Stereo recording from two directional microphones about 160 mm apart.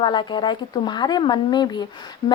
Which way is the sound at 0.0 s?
30° left (ahead or behind).